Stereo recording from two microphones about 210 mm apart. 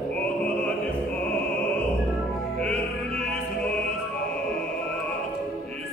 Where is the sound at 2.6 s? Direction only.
5° left (ahead or behind).